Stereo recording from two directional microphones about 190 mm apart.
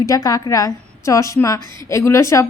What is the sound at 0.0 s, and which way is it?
A woman's voice, 20° left (ahead or behind).